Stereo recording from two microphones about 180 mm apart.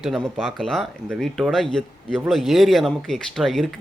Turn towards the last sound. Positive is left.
turn(degrees=0)  # may be behind; listen again after turning